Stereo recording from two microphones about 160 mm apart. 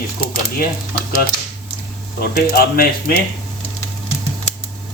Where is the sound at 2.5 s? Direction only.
70° left (ahead or behind).